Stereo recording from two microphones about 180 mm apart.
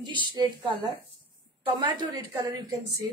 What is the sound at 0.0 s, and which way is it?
Speech, 25° right (ahead or behind).